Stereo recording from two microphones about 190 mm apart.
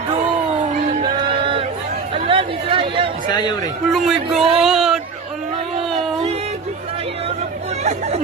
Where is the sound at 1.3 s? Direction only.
30° right (ahead or behind).